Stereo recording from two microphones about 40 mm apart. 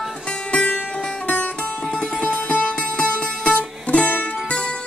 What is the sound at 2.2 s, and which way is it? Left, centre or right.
Music, left.